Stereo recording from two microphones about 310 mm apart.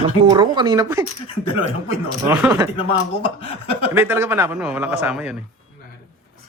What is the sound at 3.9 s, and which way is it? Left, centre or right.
A man's voice, centre.